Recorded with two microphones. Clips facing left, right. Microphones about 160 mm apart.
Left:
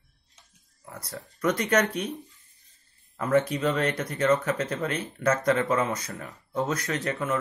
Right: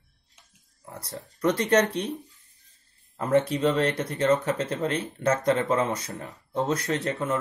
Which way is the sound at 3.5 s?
30° right (ahead or behind).